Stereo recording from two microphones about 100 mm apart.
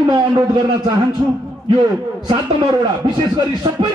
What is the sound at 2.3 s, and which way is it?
A man's voice, 50° right (ahead or behind).